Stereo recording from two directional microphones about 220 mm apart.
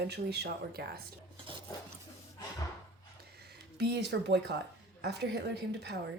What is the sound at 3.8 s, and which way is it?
A woman's voice, 50° right (ahead or behind).